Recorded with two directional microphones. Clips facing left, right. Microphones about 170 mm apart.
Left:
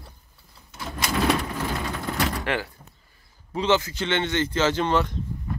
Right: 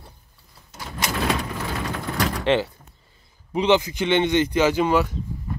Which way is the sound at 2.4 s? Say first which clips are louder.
Right 7 dB; 25° right (ahead or behind).